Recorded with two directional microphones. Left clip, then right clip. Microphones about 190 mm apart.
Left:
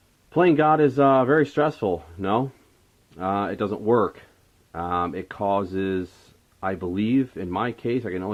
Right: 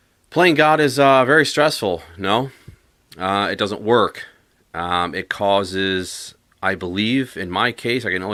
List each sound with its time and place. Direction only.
0.3 s speech: 15° right (ahead or behind)